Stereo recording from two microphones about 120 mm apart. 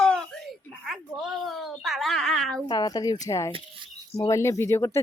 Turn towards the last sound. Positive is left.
turn(degrees=20)  # may be behind; listen again after turning